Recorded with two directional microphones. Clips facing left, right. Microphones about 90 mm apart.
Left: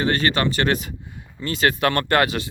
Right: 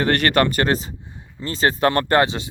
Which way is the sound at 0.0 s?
60° right (ahead or behind).